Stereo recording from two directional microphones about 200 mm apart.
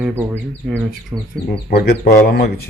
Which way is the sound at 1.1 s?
5° right (ahead or behind).